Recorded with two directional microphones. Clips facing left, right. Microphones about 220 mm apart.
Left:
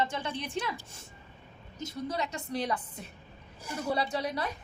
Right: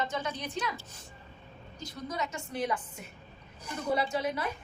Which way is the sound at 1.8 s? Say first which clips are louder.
Left 3 dB; 30° left (ahead or behind).